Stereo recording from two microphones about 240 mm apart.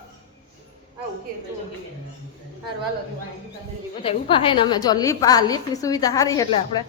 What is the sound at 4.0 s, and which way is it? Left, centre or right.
A woman's voice, left.